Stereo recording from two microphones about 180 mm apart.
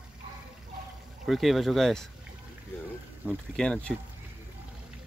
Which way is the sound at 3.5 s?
5° left (ahead or behind).